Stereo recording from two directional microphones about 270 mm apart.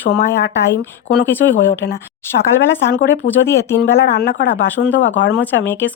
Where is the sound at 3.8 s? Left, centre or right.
Left.